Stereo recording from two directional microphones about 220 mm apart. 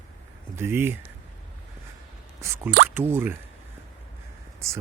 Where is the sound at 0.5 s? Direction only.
10° right (ahead or behind).